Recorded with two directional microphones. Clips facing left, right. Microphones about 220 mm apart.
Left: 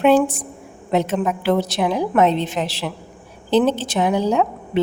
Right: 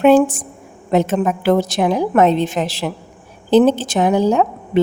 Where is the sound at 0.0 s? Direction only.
45° right (ahead or behind).